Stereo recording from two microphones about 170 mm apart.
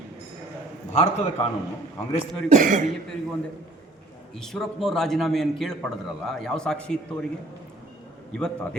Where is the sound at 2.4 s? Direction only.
45° right (ahead or behind).